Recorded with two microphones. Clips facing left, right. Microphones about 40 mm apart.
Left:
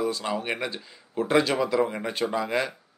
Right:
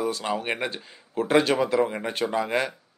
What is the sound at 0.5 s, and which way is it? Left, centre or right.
A man's voice, right.